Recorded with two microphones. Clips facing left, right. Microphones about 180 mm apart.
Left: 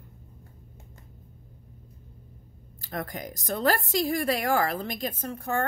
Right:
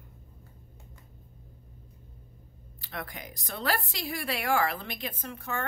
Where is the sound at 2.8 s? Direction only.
45° left (ahead or behind).